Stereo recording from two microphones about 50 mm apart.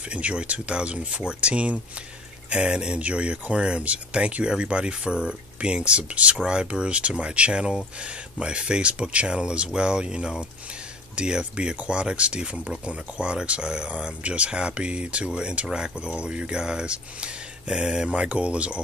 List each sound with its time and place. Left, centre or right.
0.1 s speech: right